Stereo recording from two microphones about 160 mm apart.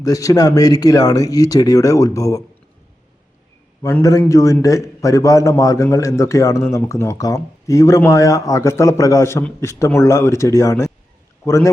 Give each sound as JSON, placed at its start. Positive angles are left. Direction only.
{"t": 0.0, "sound": "a man's voice", "side_deg": 20}
{"t": 4.2, "sound": "a man's voice", "side_deg": 20}